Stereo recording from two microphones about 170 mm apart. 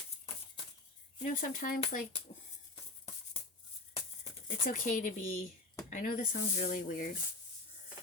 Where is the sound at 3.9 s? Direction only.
35° left (ahead or behind).